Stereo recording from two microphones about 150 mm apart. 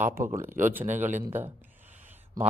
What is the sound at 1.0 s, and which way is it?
Speech, 55° right (ahead or behind).